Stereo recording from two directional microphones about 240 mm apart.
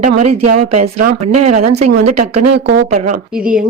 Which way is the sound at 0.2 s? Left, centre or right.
Right.